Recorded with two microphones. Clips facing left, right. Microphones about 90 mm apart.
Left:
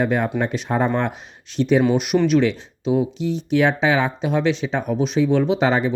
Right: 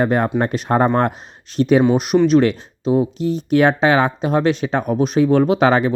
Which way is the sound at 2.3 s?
40° right (ahead or behind).